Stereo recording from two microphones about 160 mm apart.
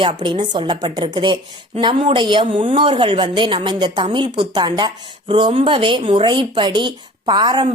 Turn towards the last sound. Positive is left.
turn(degrees=-25)  # may be behind; listen again after turning